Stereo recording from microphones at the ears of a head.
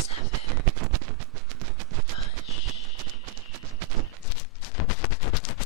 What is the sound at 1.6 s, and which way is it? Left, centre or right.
Machine gun, right.